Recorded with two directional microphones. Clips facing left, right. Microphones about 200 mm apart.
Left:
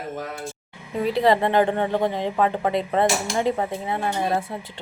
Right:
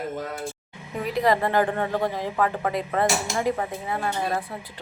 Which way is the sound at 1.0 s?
30° left (ahead or behind).